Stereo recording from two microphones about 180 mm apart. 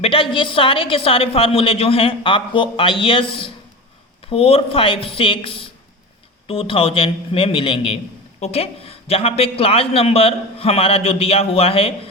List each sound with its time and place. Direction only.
0.0 s a man's voice: 30° left (ahead or behind)